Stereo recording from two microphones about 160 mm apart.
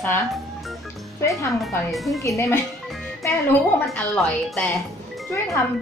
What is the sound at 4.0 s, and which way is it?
Speech, 5° left (ahead or behind).